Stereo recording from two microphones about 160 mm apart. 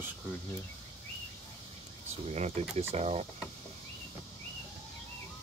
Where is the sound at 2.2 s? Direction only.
45° right (ahead or behind).